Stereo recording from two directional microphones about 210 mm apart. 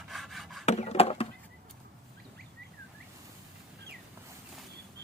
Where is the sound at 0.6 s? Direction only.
30° left (ahead or behind).